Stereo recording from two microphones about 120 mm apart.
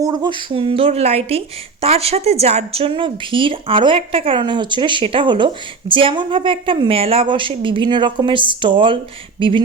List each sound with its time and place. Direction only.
0.0 s speech: 35° right (ahead or behind)